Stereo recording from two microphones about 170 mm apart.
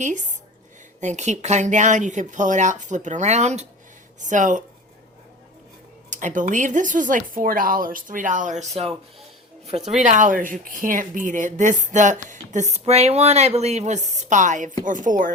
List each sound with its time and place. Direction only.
0.0 s speech: 45° right (ahead or behind)
6.1 s speech: 50° right (ahead or behind)